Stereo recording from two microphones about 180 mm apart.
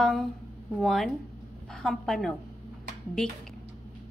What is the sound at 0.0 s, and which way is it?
A woman's voice, centre (ahead or behind).